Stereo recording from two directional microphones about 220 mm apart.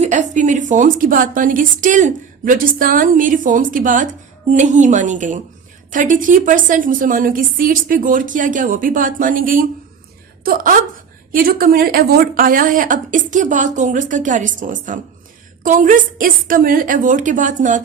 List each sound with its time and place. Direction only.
0.0 s a woman's voice: 35° right (ahead or behind)